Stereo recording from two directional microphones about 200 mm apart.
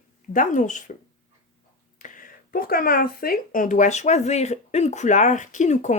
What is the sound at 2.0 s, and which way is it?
Speech, 40° left (ahead or behind).